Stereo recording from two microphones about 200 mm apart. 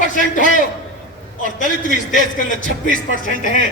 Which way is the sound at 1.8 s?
40° left (ahead or behind).